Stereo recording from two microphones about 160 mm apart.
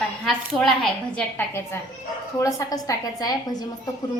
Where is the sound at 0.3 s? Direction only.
Centre (ahead or behind).